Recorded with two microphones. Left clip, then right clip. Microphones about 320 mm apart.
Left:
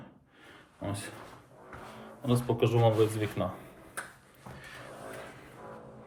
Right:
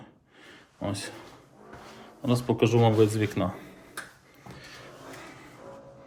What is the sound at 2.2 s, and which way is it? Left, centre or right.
Speech, right.